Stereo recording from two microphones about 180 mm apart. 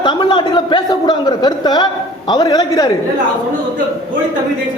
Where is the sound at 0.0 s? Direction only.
25° left (ahead or behind).